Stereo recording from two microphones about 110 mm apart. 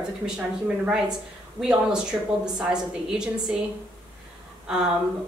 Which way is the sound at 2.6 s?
5° right (ahead or behind).